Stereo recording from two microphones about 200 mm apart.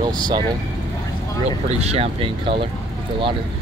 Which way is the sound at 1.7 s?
30° right (ahead or behind).